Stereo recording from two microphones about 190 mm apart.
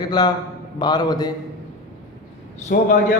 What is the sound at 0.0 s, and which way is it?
A man's voice, 20° left (ahead or behind).